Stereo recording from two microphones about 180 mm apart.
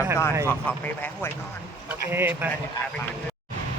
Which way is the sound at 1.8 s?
10° right (ahead or behind).